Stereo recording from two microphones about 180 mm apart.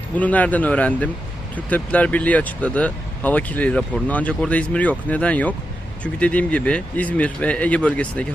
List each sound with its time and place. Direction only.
0.2 s speech: 10° left (ahead or behind)